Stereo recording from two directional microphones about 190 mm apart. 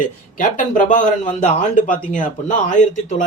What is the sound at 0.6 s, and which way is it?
Speech, 45° left (ahead or behind).